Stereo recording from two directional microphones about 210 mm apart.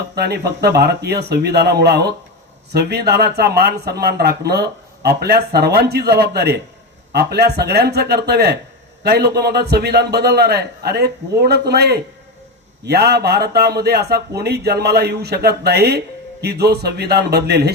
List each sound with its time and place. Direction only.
0.2 s a man's voice: 50° right (ahead or behind)